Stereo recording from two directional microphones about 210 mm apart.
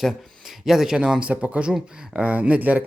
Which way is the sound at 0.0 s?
Centre (ahead or behind).